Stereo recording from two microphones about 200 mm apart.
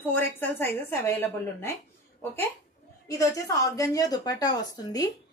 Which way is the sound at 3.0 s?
15° left (ahead or behind).